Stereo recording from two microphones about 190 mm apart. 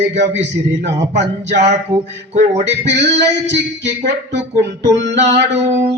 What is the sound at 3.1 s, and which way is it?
Speech, 35° right (ahead or behind).